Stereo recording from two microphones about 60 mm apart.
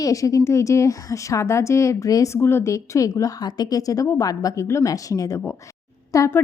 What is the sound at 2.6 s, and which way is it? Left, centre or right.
A woman's voice, left.